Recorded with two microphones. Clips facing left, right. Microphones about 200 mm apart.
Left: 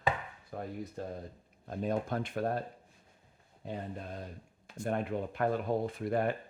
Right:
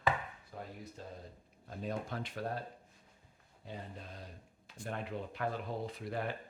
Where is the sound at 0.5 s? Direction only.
60° left (ahead or behind).